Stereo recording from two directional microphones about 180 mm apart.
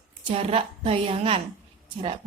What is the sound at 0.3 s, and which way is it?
A woman's voice, 30° right (ahead or behind).